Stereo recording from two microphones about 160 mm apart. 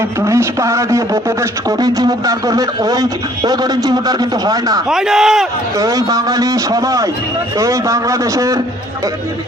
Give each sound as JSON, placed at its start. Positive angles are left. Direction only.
{"t": 0.2, "sound": "a man's voice", "side_deg": -20}
{"t": 4.9, "sound": "speech", "side_deg": -5}
{"t": 5.8, "sound": "a man's voice", "side_deg": -20}